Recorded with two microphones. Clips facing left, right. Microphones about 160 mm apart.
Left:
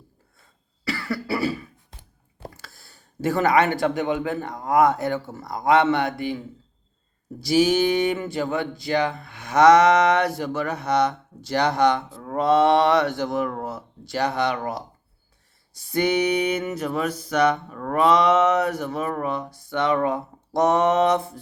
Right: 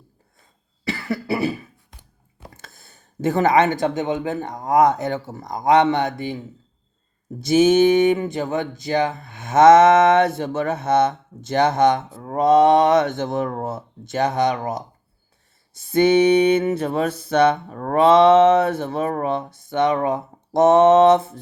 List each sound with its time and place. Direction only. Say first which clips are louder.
0.9 s cough: right 2 dB; 20° right (ahead or behind)
2.6 s speech: right 1 dB; 20° right (ahead or behind)
7.4 s speech: right 5 dB; 20° right (ahead or behind)